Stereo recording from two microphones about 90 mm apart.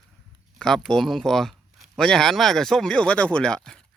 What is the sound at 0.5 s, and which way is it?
Speech, 5° left (ahead or behind).